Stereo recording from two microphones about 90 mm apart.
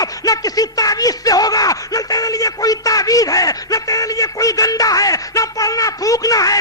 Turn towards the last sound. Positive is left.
turn(degrees=40)  # may be behind; listen again after turning